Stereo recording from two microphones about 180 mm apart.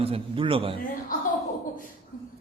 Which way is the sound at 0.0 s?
30° right (ahead or behind).